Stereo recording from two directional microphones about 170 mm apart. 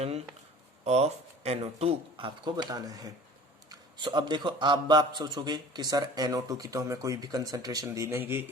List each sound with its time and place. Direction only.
0.9 s a man's voice: 40° right (ahead or behind); by 8.4 s 10° right (ahead or behind)